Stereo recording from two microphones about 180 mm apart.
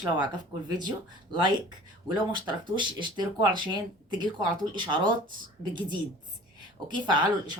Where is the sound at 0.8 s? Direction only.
25° right (ahead or behind).